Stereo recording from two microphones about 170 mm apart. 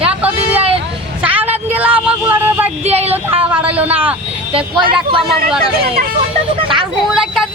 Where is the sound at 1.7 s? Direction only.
10° right (ahead or behind).